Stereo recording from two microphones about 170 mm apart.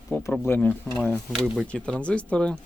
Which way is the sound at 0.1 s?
15° left (ahead or behind).